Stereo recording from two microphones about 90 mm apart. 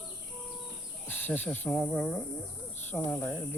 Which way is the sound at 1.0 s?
20° left (ahead or behind).